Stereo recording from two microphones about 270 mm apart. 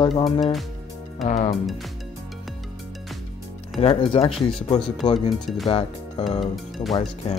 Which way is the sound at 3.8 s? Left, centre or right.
Left.